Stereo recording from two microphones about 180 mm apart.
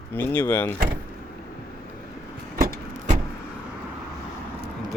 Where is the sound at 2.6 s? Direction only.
40° right (ahead or behind).